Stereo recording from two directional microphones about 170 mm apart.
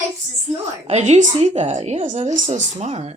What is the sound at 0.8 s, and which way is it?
A woman's voice, 40° right (ahead or behind).